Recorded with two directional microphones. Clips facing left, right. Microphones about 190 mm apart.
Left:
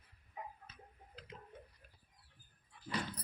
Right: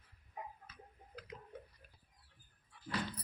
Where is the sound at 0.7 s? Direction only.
25° left (ahead or behind).